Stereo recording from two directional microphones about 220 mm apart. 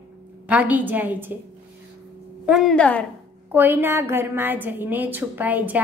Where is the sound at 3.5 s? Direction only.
10° right (ahead or behind).